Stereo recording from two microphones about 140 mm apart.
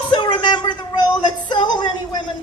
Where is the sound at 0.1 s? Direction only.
35° left (ahead or behind).